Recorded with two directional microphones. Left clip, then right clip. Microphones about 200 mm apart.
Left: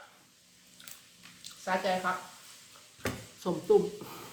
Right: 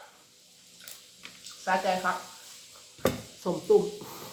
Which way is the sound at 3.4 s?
20° left (ahead or behind).